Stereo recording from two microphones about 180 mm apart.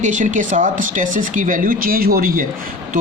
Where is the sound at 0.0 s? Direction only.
45° right (ahead or behind).